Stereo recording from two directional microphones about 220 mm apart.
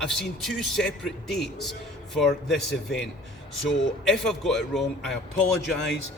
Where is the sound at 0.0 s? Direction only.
Centre (ahead or behind).